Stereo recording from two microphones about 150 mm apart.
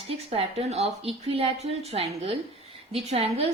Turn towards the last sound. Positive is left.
turn(degrees=-45)  # may be behind; listen again after turning